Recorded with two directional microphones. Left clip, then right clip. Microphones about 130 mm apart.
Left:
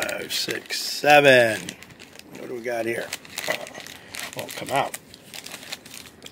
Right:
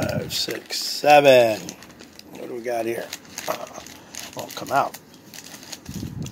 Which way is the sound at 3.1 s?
25° left (ahead or behind).